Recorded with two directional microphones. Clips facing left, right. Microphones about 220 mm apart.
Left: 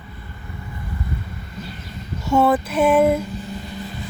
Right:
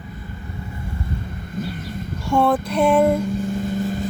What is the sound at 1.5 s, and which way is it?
Vehicle, 50° right (ahead or behind).